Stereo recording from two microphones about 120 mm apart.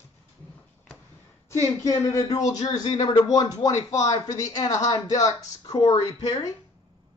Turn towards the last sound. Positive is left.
turn(degrees=30)  # may be behind; listen again after turning